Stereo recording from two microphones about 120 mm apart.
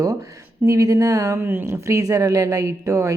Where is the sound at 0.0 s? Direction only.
30° right (ahead or behind).